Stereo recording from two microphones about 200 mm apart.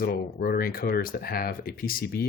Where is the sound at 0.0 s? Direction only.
45° left (ahead or behind).